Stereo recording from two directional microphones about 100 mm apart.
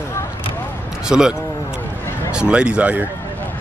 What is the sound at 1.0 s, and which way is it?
Speech, 5° right (ahead or behind).